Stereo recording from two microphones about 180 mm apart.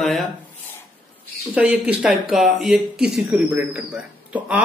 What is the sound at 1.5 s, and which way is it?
Speech, 5° right (ahead or behind).